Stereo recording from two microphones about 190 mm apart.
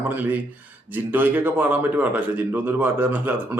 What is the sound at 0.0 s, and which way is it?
Speech, 10° right (ahead or behind).